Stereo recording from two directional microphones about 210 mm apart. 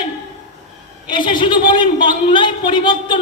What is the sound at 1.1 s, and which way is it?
A man's voice, 20° left (ahead or behind).